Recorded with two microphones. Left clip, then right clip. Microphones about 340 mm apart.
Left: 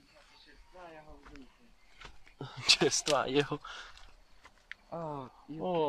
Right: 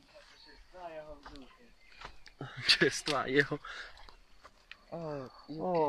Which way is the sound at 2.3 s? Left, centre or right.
Centre.